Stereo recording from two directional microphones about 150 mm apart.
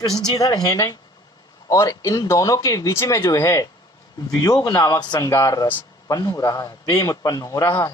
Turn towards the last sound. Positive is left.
turn(degrees=20)  # may be behind; listen again after turning